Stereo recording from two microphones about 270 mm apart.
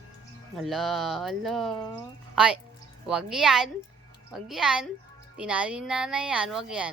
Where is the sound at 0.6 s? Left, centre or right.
Centre.